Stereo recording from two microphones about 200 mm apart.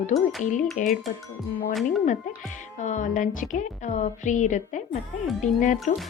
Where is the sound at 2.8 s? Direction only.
40° left (ahead or behind).